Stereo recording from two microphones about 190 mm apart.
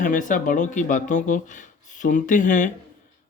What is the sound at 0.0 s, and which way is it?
A man's voice, 45° left (ahead or behind).